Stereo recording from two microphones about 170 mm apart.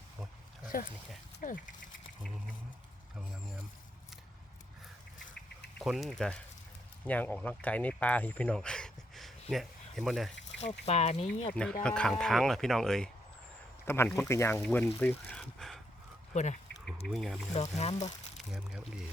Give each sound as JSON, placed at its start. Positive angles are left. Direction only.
{"t": 0.7, "sound": "speech", "side_deg": 55}
{"t": 5.8, "sound": "speech", "side_deg": 0}
{"t": 10.6, "sound": "speech", "side_deg": 40}
{"t": 11.5, "sound": "speech", "side_deg": 5}
{"t": 13.8, "sound": "speech", "side_deg": 15}
{"t": 16.3, "sound": "speech", "side_deg": 45}
{"t": 17.1, "sound": "speech", "side_deg": 0}
{"t": 17.5, "sound": "speech", "side_deg": 40}
{"t": 18.3, "sound": "speech", "side_deg": -5}